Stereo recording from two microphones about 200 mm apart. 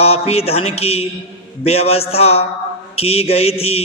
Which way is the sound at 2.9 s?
30° left (ahead or behind).